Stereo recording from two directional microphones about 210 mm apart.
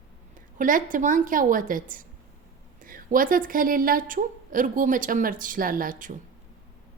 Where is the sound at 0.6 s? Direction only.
40° right (ahead or behind).